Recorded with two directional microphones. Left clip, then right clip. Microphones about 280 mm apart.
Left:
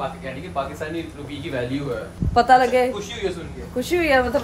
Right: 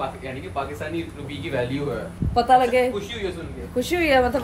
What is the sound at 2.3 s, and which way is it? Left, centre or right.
A woman's voice, centre.